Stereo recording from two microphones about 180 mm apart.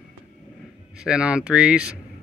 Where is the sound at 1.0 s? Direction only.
5° right (ahead or behind).